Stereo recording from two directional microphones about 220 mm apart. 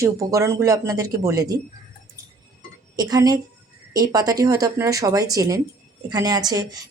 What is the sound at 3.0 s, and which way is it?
Speech, 15° right (ahead or behind).